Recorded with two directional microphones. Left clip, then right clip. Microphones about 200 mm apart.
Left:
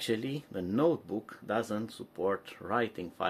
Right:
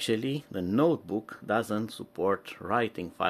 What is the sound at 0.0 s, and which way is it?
Speech, 35° right (ahead or behind).